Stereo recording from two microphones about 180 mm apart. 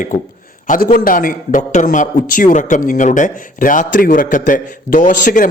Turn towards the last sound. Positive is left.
turn(degrees=45)  # may be behind; listen again after turning